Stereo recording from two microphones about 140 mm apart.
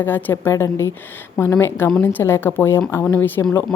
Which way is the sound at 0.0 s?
15° left (ahead or behind).